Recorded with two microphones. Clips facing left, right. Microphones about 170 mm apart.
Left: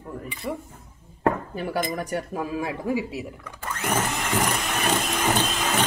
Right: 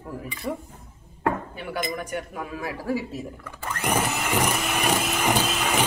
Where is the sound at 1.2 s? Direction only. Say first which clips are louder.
Left 3 dB; 40° left (ahead or behind); by 3.5 s 10° left (ahead or behind).